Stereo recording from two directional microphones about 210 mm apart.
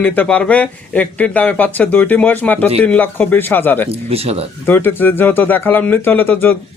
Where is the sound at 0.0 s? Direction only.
5° left (ahead or behind).